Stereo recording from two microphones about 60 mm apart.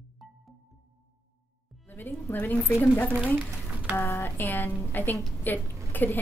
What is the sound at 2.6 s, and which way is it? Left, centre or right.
Speech, left.